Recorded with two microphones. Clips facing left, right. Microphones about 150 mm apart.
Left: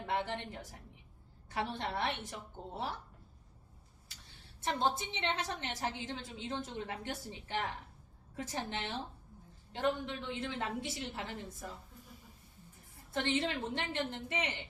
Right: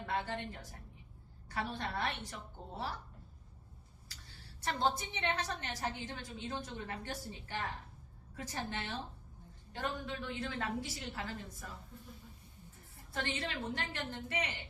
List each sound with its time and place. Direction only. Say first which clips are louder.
0.0 s a woman's voice: left 2 dB; 20° left (ahead or behind)
4.6 s a woman's voice: left 1 dB; 20° left (ahead or behind)
13.1 s a woman's voice: left 5 dB; 20° left (ahead or behind)